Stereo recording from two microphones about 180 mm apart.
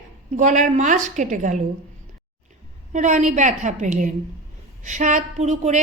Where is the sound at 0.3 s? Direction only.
45° right (ahead or behind).